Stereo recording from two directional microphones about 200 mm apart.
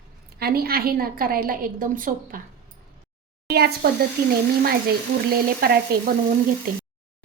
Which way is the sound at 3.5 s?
50° right (ahead or behind).